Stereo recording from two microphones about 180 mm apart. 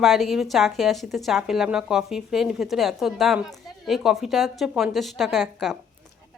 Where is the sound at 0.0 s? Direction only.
Centre (ahead or behind).